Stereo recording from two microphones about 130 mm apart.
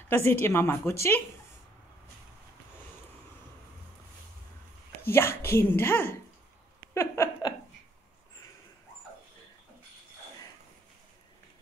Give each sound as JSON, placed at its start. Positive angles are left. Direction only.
{"t": 0.1, "sound": "speech", "side_deg": 15}
{"t": 5.0, "sound": "speech", "side_deg": 20}
{"t": 6.9, "sound": "laughter", "side_deg": 20}